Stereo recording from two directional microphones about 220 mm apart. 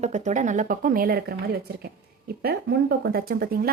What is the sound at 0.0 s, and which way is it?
A woman's voice, 30° right (ahead or behind).